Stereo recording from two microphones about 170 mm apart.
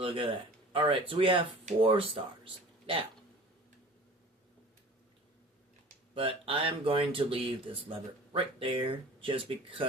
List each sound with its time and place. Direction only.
0.0 s speech: 30° right (ahead or behind)
6.1 s speech: 35° right (ahead or behind)